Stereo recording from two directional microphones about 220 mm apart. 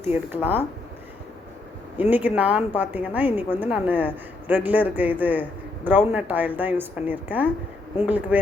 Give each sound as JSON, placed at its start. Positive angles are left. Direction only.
{"t": 0.0, "sound": "a woman's voice", "side_deg": -10}
{"t": 2.0, "sound": "a woman's voice", "side_deg": -10}